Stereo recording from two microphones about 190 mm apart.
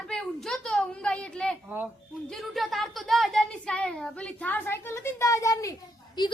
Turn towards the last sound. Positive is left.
turn(degrees=20)  # may be behind; listen again after turning